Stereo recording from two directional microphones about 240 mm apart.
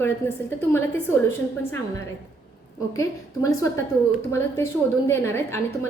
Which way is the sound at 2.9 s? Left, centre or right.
Centre.